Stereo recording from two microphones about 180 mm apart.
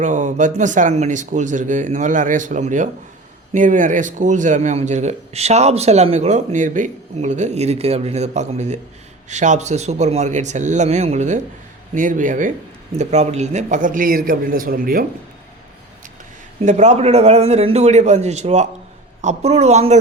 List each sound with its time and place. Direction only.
0.0 s speech: 45° right (ahead or behind)
16.6 s speech: 40° right (ahead or behind)